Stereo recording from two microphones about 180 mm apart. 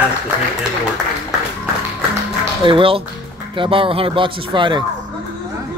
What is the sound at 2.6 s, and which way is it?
Speech, 30° right (ahead or behind).